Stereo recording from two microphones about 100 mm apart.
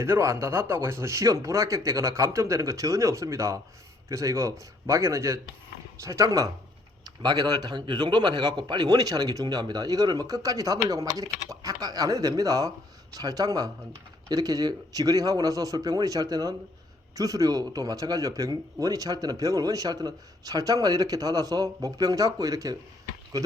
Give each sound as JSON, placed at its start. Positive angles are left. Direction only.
{"t": 0.0, "sound": "a man's voice", "side_deg": -30}